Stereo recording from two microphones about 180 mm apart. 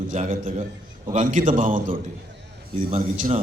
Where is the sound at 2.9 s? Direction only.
35° right (ahead or behind).